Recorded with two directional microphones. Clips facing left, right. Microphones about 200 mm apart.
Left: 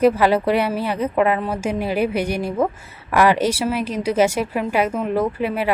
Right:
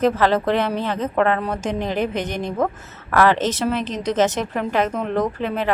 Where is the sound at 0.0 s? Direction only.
10° left (ahead or behind).